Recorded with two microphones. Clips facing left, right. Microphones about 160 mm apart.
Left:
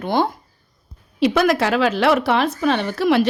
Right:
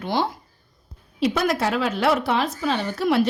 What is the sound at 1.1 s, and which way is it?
A woman's voice, 85° left.